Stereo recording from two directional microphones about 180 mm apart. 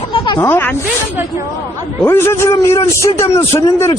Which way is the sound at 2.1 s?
15° left (ahead or behind).